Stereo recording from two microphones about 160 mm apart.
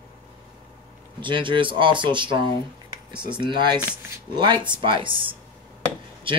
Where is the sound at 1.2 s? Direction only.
30° right (ahead or behind).